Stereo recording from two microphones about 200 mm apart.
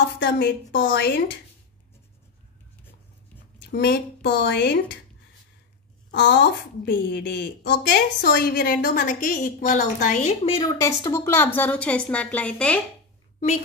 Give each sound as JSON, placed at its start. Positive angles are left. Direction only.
{"t": 0.2, "sound": "speech", "side_deg": 55}
{"t": 3.7, "sound": "speech", "side_deg": 55}
{"t": 6.1, "sound": "a woman's voice", "side_deg": 60}
{"t": 10.6, "sound": "a woman's voice", "side_deg": 20}